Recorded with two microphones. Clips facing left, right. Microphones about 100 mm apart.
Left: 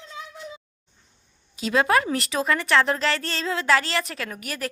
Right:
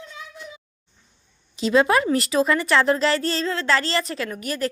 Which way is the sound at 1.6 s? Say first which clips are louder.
Right 3 dB; centre (ahead or behind).